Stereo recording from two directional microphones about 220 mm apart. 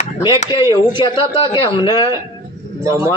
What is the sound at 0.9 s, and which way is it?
Speech, 20° left (ahead or behind).